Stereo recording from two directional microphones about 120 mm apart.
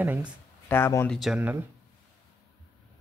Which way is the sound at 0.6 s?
20° left (ahead or behind).